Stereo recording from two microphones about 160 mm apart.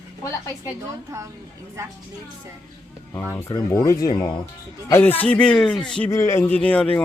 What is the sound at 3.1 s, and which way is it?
Speech, 15° left (ahead or behind).